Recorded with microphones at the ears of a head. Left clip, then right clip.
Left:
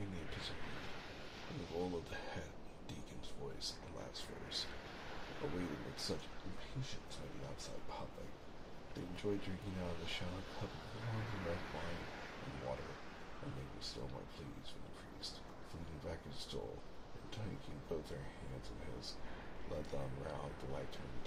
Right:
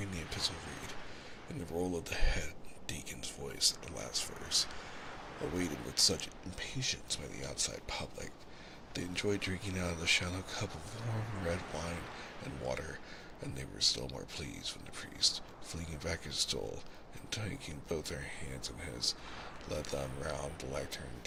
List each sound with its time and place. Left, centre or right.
0.0 s a sound: right
1.5 s speech: right
3.6 s speech: right
16.0 s speech: right